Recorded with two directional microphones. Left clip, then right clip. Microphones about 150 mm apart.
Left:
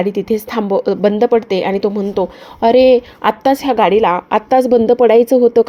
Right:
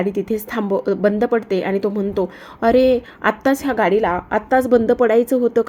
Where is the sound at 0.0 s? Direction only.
20° left (ahead or behind).